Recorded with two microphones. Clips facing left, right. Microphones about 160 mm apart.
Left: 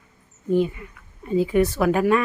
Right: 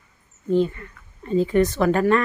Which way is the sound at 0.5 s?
10° left (ahead or behind).